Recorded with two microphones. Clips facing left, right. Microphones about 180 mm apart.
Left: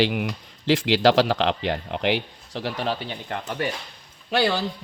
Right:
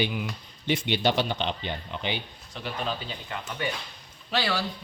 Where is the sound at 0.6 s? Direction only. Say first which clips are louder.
Left 7 dB; 90° left; by 3.7 s 50° left (ahead or behind).